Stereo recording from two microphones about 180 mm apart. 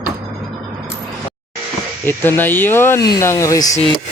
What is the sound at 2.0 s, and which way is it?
Speech, 10° left (ahead or behind).